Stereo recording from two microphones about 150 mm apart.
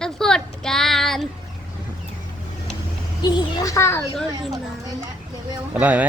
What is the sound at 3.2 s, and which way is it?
Speech, 30° left (ahead or behind).